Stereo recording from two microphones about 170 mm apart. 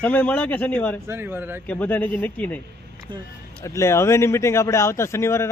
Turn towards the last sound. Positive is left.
turn(degrees=15)  # may be behind; listen again after turning